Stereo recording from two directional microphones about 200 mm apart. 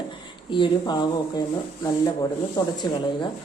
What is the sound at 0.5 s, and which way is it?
A man's voice, 20° left (ahead or behind).